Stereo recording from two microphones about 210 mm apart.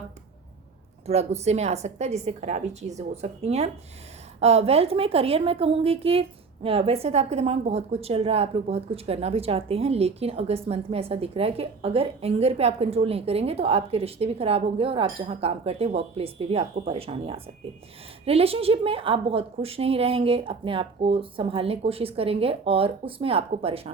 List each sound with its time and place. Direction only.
1.0 s a woman's voice: 30° right (ahead or behind)